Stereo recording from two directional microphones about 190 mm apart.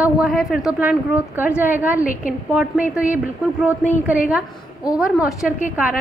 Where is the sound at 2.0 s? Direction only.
45° left (ahead or behind).